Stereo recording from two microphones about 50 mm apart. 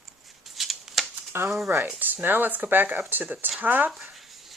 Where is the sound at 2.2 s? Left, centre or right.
Right.